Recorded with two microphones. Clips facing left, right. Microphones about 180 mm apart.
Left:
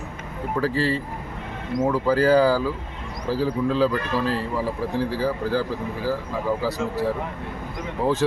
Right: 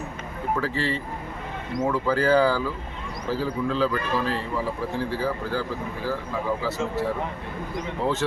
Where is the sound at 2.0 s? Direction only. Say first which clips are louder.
Left 3 dB; 35° left (ahead or behind).